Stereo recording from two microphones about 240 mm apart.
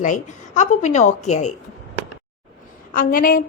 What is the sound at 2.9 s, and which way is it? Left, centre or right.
Speech, left.